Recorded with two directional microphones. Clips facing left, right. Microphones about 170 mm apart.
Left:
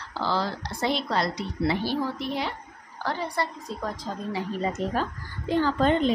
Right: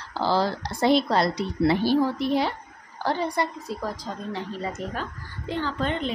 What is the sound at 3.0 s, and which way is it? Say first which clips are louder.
Speech: right 3 dB; 25° right (ahead or behind).